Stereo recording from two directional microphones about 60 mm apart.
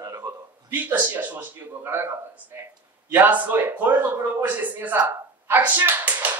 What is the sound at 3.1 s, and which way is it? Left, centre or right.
A man's voice, right.